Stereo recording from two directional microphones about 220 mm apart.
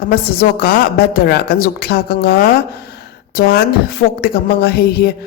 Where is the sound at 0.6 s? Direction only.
45° left (ahead or behind).